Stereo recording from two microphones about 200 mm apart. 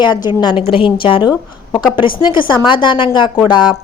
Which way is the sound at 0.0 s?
20° left (ahead or behind).